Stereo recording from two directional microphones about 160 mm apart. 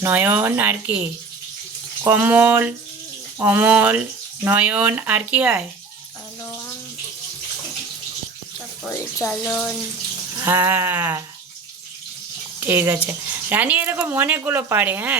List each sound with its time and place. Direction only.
0.0 s speech: 10° right (ahead or behind)
2.0 s speech: 10° right (ahead or behind)
8.9 s speech: 20° left (ahead or behind)
9.5 s speech: 5° left (ahead or behind)
10.3 s speech: 15° right (ahead or behind)
12.5 s speech: 15° right (ahead or behind)